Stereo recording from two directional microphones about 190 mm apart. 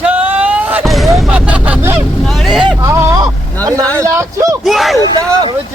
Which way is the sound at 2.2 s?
Centre (ahead or behind).